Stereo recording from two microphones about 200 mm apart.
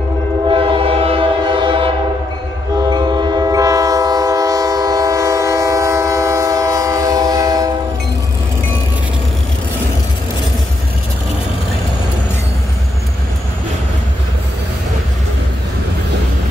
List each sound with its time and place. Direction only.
0.5 s train: 25° right (ahead or behind)